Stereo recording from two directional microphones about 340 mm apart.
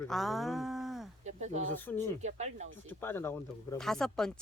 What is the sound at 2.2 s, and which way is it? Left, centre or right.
Speech, centre.